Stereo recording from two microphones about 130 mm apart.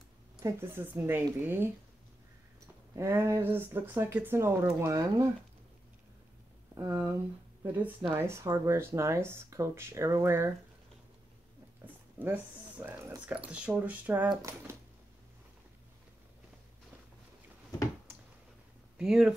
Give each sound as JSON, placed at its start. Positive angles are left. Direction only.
{"t": 0.4, "sound": "speech", "side_deg": -20}
{"t": 3.0, "sound": "speech", "side_deg": -20}
{"t": 6.7, "sound": "speech", "side_deg": -15}
{"t": 11.8, "sound": "speech", "side_deg": -15}
{"t": 13.5, "sound": "speech", "side_deg": -10}
{"t": 18.9, "sound": "speech", "side_deg": -5}